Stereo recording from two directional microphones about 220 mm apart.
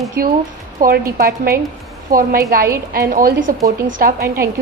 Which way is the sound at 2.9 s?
40° right (ahead or behind).